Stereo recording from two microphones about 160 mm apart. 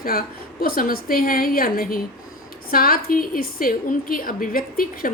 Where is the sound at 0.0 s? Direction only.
70° left (ahead or behind).